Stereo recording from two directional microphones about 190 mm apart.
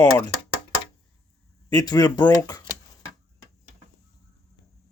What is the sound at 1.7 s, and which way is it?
Speech, 20° left (ahead or behind).